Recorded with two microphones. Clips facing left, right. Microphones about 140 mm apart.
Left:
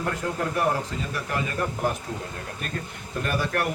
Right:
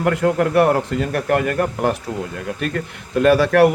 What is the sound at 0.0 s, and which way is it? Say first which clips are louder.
A man's voice: right 11 dB; 80° right.